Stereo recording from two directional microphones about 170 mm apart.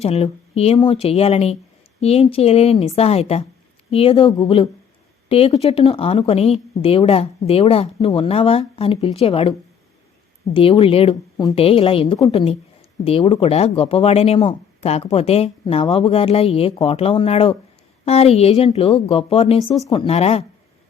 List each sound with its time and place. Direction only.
0.0 s speech: 35° left (ahead or behind)